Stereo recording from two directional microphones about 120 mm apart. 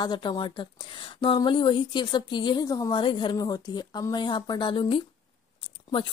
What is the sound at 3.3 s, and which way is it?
Speech, 30° left (ahead or behind).